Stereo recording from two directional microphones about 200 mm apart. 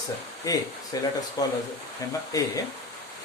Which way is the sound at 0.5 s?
15° left (ahead or behind).